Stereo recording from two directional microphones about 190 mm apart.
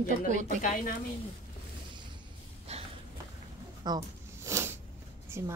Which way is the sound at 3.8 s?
20° right (ahead or behind).